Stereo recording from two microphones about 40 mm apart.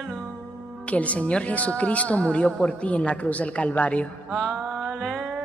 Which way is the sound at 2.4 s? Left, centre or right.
Centre.